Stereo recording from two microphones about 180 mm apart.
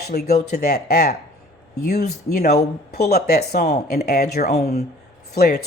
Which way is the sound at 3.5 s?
40° left (ahead or behind).